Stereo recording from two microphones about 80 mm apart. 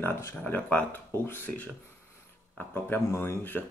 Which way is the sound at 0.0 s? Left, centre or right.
Left.